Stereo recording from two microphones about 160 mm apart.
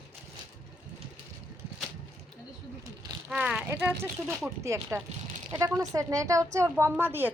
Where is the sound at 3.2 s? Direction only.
5° right (ahead or behind).